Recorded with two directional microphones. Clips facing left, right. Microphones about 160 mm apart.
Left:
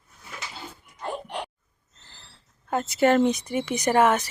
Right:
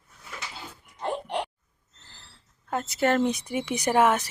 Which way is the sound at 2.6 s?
Centre (ahead or behind).